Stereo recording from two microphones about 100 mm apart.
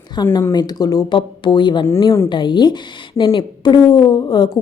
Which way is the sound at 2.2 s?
50° left (ahead or behind).